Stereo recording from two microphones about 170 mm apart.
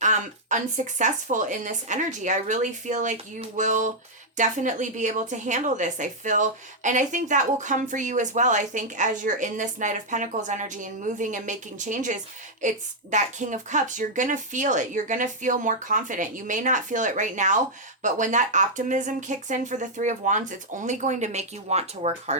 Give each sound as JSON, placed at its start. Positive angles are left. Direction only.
{"t": 0.0, "sound": "a woman's voice", "side_deg": -45}